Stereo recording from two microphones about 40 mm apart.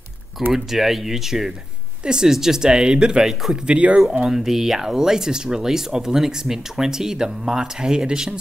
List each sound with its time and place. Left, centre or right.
0.5 s speech: centre
2.0 s speech: centre
4.3 s speech: centre